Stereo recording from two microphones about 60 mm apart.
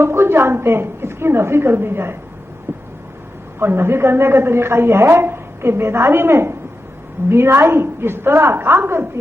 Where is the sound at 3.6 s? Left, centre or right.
Right.